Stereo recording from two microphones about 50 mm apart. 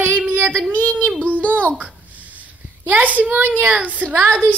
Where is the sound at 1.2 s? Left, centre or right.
Right.